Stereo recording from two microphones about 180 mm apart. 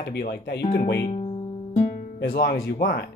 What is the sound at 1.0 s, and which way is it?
Music, 35° left (ahead or behind).